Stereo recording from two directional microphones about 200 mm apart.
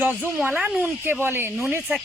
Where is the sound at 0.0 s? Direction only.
10° right (ahead or behind).